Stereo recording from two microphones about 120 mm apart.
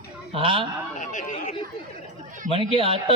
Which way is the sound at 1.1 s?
90° left.